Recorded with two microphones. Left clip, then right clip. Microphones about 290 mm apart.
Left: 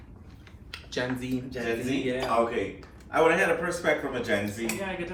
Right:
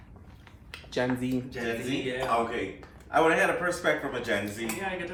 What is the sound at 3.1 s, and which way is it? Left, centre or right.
Speech, centre.